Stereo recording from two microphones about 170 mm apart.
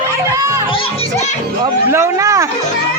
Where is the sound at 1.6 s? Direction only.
15° right (ahead or behind).